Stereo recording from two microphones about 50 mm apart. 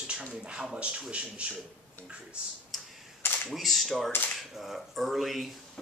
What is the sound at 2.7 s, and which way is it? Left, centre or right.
Camera, centre.